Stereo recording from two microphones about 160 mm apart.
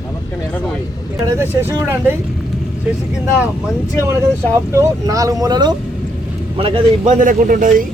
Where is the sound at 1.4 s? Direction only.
20° right (ahead or behind).